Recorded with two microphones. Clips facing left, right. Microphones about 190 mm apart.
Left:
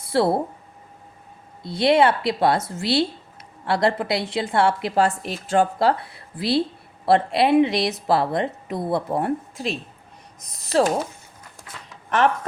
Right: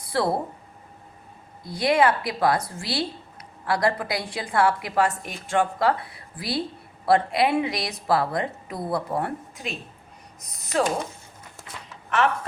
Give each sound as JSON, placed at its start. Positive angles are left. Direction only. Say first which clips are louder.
{"t": 0.0, "sound": "speech", "louder": "left 4 dB", "side_deg": 25}
{"t": 1.6, "sound": "a woman's voice", "louder": "left 3 dB", "side_deg": 25}